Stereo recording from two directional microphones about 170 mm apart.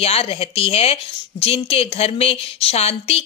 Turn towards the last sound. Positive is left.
turn(degrees=40)  # may be behind; listen again after turning